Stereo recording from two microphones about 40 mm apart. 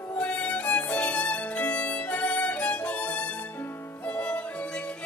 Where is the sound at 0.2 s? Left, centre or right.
Left.